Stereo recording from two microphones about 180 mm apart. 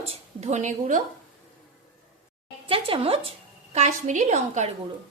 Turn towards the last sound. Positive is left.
turn(degrees=-40)  # may be behind; listen again after turning